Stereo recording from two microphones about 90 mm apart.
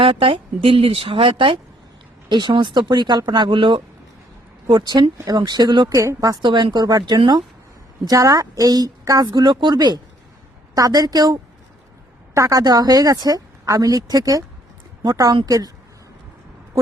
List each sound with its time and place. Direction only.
0.0 s speech: 85° right
2.3 s speech: 55° right (ahead or behind)
4.7 s speech: 50° right (ahead or behind)
5.9 s a woman's voice: 35° right (ahead or behind)
6.4 s speech: 60° right (ahead or behind)
10.8 s a woman's voice: 45° right (ahead or behind)